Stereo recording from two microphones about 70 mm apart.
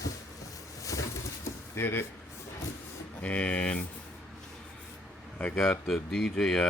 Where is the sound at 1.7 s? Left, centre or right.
Left.